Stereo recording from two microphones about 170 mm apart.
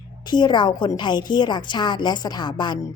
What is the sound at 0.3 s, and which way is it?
A woman's voice, 25° left (ahead or behind).